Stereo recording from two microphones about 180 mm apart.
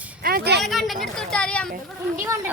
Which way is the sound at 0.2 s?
55° right (ahead or behind).